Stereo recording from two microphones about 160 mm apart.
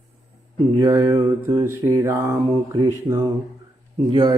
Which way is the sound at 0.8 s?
20° right (ahead or behind).